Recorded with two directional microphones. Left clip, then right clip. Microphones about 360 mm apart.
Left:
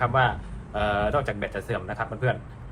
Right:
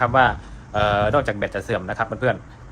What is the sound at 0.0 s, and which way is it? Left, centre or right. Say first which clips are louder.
Speech: right 6 dB; right.